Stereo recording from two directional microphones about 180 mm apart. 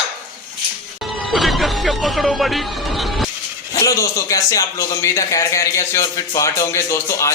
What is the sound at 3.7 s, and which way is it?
A man's voice, 20° left (ahead or behind).